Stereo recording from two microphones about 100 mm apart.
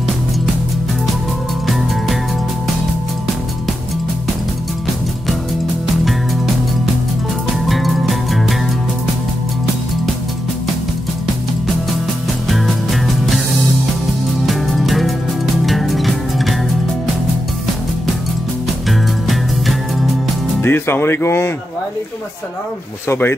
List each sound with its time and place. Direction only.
1.7 s music: centre (ahead or behind)
7.6 s music: centre (ahead or behind)
12.4 s music: centre (ahead or behind)
18.9 s music: centre (ahead or behind)
20.6 s speech: 20° left (ahead or behind)
23.0 s speech: 20° left (ahead or behind)